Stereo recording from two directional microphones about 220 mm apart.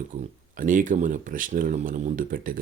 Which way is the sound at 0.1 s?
35° right (ahead or behind).